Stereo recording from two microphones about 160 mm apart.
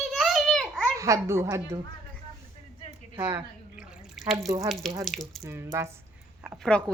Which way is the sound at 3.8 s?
5° right (ahead or behind).